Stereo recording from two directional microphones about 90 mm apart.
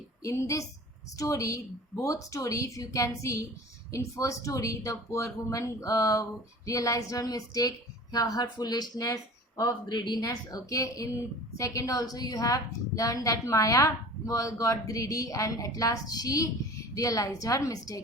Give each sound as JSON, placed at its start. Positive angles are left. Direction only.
{"t": 0.2, "sound": "a woman's voice", "side_deg": 35}